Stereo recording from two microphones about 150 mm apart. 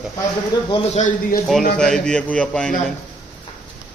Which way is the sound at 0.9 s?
55° left (ahead or behind).